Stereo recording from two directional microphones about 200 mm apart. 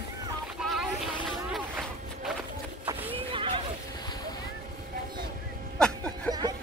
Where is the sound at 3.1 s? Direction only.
25° right (ahead or behind).